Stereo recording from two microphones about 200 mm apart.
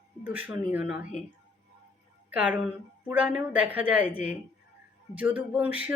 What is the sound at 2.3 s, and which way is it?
A woman's voice, 5° right (ahead or behind).